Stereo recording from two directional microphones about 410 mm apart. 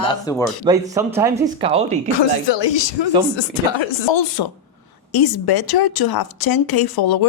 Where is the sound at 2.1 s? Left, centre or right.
Left.